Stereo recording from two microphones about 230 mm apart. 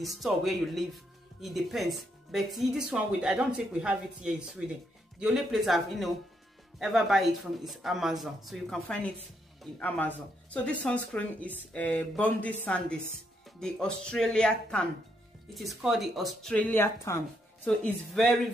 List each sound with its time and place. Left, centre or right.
0.0 s speech: centre